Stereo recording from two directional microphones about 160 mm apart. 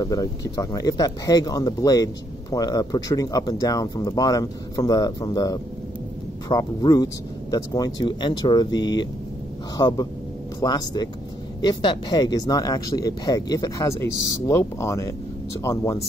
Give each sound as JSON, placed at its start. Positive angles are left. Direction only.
{"t": 0.0, "sound": "speech", "side_deg": 20}